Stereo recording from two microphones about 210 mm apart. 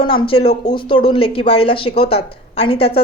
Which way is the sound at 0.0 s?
25° left (ahead or behind).